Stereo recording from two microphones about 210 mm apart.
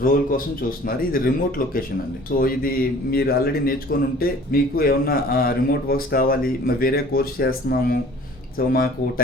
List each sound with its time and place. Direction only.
0.0 s a man's voice: 40° left (ahead or behind)